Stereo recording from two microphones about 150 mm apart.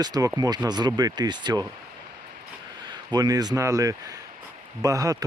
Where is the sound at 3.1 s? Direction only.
25° right (ahead or behind).